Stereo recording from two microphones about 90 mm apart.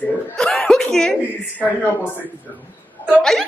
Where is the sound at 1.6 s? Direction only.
20° left (ahead or behind).